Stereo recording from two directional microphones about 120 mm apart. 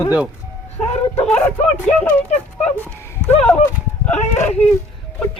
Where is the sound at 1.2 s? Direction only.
15° left (ahead or behind).